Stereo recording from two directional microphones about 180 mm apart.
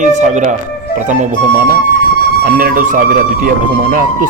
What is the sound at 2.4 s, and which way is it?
Speech, 60° right (ahead or behind).